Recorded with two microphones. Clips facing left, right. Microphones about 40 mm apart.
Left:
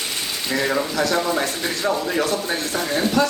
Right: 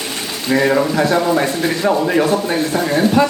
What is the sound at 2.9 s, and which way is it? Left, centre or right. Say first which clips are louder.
Speech: right 5 dB; right.